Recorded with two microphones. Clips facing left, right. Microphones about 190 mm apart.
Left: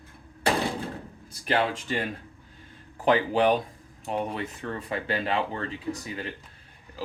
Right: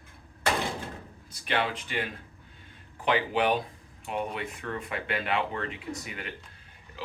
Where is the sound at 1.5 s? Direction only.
40° left (ahead or behind).